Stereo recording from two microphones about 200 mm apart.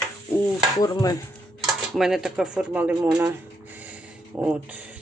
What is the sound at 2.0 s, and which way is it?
Speech, centre (ahead or behind).